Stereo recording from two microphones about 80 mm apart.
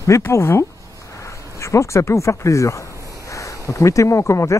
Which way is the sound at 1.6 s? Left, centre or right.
Left.